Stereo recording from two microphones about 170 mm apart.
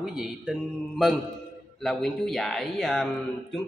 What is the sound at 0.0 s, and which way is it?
Speech, centre (ahead or behind).